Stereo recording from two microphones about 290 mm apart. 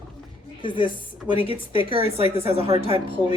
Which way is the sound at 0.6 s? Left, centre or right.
Centre.